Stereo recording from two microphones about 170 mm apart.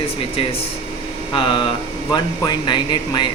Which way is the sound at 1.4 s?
30° left (ahead or behind).